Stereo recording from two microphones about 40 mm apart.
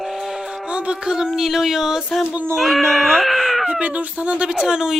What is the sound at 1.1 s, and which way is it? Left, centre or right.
Speech, centre.